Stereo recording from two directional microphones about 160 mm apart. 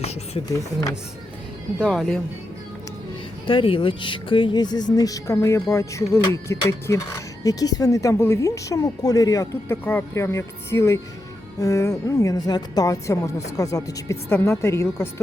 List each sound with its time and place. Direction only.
0.0 s speech: 40° left (ahead or behind)
0.4 s speech: 20° left (ahead or behind)
1.8 s speech: 5° left (ahead or behind)
3.4 s speech: 35° left (ahead or behind); by 14.8 s 15° left (ahead or behind)